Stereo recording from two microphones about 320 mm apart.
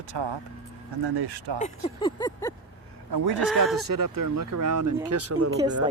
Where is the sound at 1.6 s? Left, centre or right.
Centre.